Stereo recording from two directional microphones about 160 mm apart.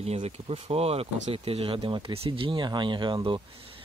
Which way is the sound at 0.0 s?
40° right (ahead or behind).